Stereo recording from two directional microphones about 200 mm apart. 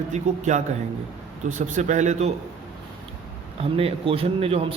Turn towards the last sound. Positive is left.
turn(degrees=-30)  # may be behind; listen again after turning